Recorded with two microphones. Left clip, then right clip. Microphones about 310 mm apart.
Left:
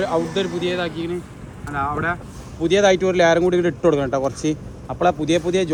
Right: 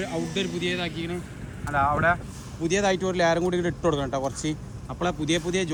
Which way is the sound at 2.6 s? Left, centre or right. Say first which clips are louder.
Left 8 dB; left.